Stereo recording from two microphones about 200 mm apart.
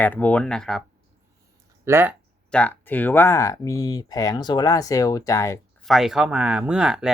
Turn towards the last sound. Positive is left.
turn(degrees=-5)  # may be behind; listen again after turning